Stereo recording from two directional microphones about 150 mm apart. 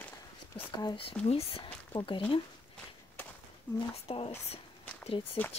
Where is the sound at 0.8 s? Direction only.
35° left (ahead or behind).